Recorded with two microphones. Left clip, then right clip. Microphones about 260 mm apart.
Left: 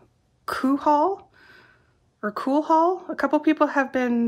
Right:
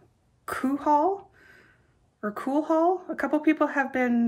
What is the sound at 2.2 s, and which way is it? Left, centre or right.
A woman's voice, centre.